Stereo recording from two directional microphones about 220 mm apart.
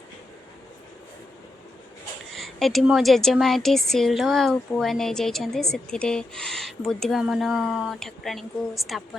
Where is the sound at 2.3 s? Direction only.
Centre (ahead or behind).